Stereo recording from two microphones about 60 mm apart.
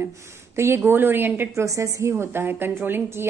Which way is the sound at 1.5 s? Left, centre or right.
Right.